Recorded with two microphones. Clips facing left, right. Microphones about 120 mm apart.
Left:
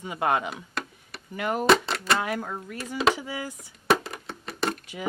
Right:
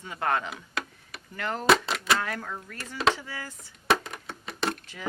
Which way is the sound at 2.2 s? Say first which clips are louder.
Left 4 dB; 15° left (ahead or behind).